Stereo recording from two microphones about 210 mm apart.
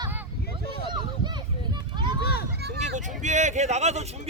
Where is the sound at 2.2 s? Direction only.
50° left (ahead or behind).